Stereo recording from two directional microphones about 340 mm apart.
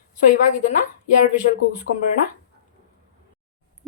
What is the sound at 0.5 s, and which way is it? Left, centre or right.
Speech, left.